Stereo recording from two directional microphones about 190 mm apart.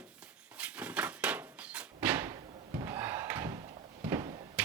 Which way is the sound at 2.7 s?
15° right (ahead or behind).